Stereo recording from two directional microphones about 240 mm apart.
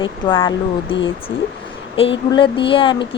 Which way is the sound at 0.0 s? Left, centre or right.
Centre.